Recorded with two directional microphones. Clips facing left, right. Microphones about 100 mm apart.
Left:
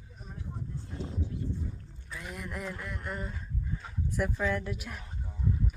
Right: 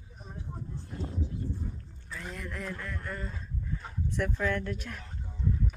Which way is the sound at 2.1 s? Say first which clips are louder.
Even; 10° left (ahead or behind).